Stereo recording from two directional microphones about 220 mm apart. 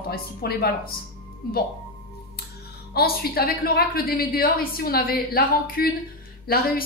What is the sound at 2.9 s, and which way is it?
A woman's voice, 45° left (ahead or behind).